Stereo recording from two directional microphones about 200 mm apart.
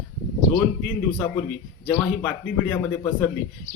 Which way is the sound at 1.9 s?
10° left (ahead or behind).